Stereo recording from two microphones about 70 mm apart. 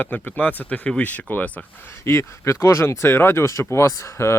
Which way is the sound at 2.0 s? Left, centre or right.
Left.